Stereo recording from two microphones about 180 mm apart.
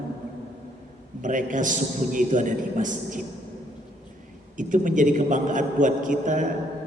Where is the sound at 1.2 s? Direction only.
45° right (ahead or behind).